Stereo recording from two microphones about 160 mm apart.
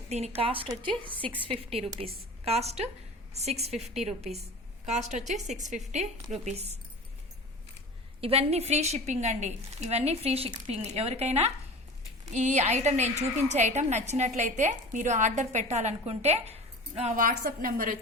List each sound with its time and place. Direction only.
0.1 s a woman's voice: 40° right (ahead or behind)
8.2 s a woman's voice: 40° right (ahead or behind)
17.2 s a woman's voice: 60° right (ahead or behind)